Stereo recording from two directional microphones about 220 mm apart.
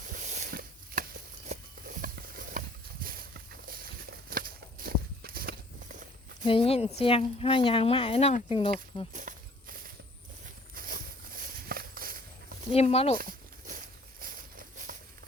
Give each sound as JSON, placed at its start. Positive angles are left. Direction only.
{"t": 0.1, "sound": "a sound", "side_deg": -35}
{"t": 4.3, "sound": "walk", "side_deg": -40}
{"t": 6.4, "sound": "speech", "side_deg": 25}
{"t": 9.1, "sound": "walk", "side_deg": -40}
{"t": 12.7, "sound": "speech", "side_deg": 30}
{"t": 13.1, "sound": "a sound", "side_deg": -40}